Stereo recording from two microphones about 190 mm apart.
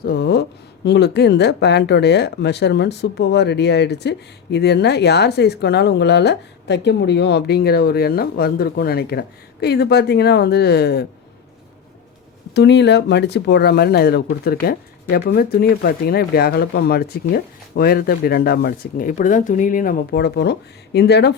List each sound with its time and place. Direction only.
0.0 s a sound: 60° left (ahead or behind)
0.9 s speech: 60° left (ahead or behind)
12.5 s speech: 65° left (ahead or behind)